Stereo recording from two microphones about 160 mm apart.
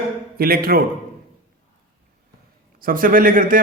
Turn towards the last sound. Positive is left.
turn(degrees=-60)  # may be behind; listen again after turning